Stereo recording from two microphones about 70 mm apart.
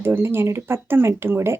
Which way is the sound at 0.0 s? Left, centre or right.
Right.